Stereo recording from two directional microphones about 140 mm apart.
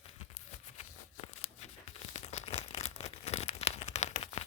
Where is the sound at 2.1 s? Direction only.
50° left (ahead or behind).